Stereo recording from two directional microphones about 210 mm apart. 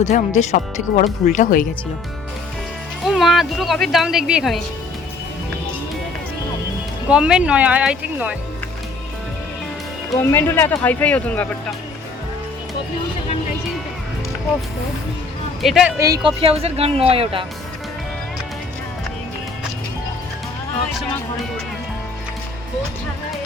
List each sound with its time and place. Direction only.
0.3 s speech: 35° left (ahead or behind)
3.0 s speech: centre (ahead or behind)
7.1 s speech: 5° right (ahead or behind)
10.1 s speech: 10° left (ahead or behind)
15.6 s speech: centre (ahead or behind)
16.0 s speech: 15° right (ahead or behind)